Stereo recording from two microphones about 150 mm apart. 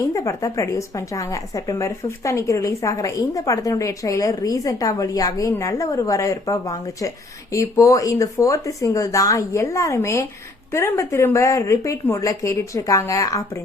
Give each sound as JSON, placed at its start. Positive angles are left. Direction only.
{"t": 0.0, "sound": "a woman's voice", "side_deg": 20}